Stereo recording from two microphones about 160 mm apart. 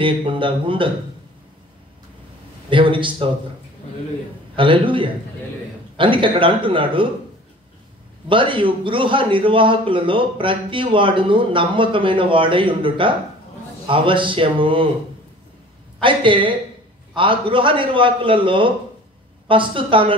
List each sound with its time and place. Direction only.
0.0 s a man's voice: 30° right (ahead or behind)
2.7 s a man's voice: 30° right (ahead or behind)
4.6 s a man's voice: 30° right (ahead or behind)
8.3 s a man's voice: 30° right (ahead or behind)
16.0 s a man's voice: 30° right (ahead or behind)